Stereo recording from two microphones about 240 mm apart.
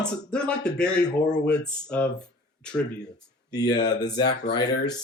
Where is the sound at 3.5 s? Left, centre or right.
Centre.